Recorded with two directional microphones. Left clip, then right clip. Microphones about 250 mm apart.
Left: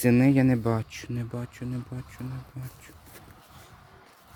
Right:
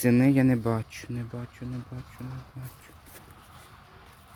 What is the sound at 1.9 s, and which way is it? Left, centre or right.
Speech, left.